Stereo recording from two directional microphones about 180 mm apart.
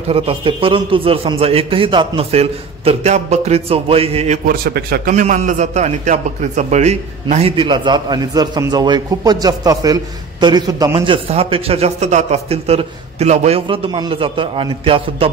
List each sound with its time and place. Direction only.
0.1 s a man's voice: 30° right (ahead or behind)
4.5 s a man's voice: 60° right (ahead or behind); by 11.1 s 20° right (ahead or behind)
11.2 s a man's voice: 35° right (ahead or behind)